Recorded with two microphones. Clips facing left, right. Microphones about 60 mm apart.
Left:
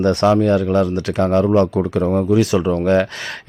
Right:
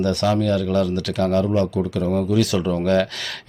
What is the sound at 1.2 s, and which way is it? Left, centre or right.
Speech, left.